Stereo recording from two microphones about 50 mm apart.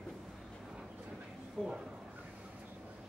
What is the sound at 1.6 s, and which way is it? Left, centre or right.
Speech, left.